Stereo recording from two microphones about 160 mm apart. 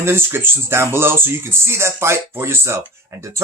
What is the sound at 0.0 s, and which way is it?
Speech, 15° right (ahead or behind).